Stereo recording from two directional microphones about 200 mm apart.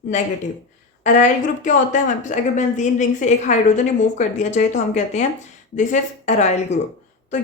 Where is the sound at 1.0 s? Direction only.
40° left (ahead or behind).